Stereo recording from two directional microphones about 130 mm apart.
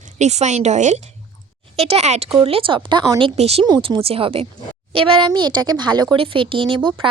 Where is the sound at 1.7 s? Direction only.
55° right (ahead or behind).